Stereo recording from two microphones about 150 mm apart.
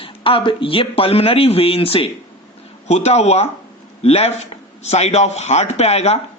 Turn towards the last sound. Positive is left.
turn(degrees=45)  # may be behind; listen again after turning